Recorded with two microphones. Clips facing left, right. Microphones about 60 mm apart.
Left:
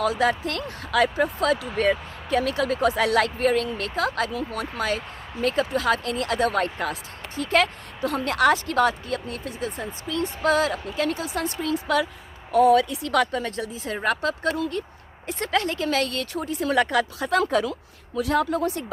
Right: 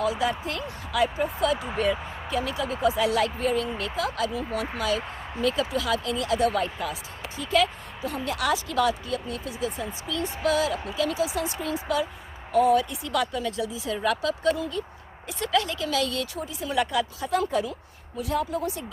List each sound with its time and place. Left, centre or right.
0.0 s a woman's voice: left
14.4 s speech: left
15.3 s speech: left